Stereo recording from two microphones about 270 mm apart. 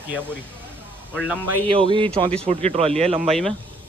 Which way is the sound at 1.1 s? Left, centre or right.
Centre.